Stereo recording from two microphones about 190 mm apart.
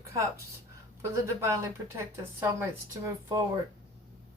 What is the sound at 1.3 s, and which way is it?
A woman's voice, 15° right (ahead or behind).